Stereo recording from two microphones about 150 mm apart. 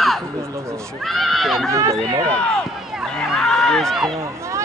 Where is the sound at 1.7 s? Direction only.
20° right (ahead or behind).